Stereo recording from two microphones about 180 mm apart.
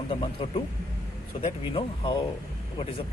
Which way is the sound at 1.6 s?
30° left (ahead or behind).